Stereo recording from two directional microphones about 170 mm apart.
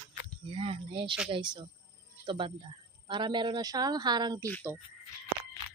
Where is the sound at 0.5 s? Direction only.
30° right (ahead or behind).